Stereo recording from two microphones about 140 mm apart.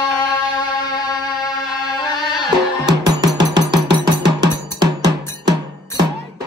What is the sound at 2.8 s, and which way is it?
Music, 30° right (ahead or behind).